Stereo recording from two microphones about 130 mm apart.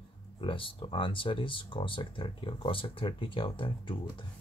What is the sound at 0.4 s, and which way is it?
Speech, 40° left (ahead or behind).